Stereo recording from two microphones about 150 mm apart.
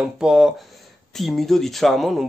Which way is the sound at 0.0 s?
5° right (ahead or behind).